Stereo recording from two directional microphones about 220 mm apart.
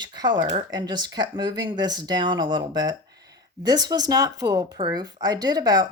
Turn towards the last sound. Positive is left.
turn(degrees=-15)  # may be behind; listen again after turning